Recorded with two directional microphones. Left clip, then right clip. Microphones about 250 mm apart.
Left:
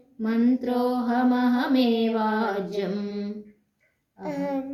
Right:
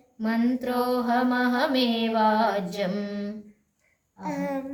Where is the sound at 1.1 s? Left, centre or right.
Right.